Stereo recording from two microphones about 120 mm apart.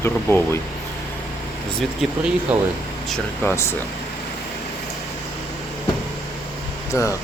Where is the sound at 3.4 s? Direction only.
20° left (ahead or behind).